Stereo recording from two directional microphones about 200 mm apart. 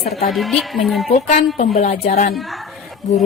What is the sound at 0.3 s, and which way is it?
Speech, centre (ahead or behind).